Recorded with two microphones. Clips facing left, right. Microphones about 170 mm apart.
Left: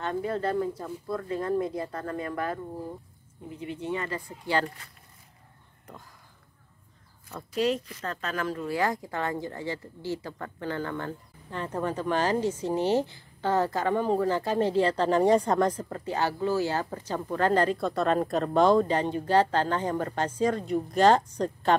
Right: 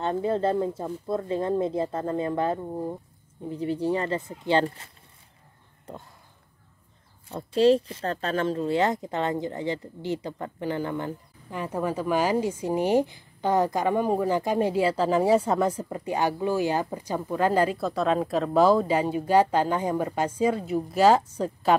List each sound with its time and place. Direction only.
0.0 s speech: 25° right (ahead or behind)
7.2 s speech: 30° right (ahead or behind); by 21.8 s 10° right (ahead or behind)